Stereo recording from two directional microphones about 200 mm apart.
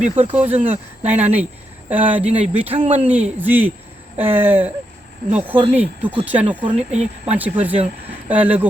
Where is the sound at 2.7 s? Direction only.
30° right (ahead or behind).